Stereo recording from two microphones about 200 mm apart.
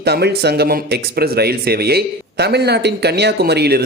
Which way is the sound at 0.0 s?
55° right (ahead or behind).